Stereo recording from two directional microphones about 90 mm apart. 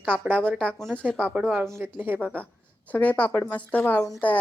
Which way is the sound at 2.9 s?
15° left (ahead or behind).